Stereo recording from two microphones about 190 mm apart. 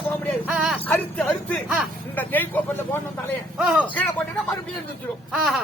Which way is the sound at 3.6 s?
5° right (ahead or behind).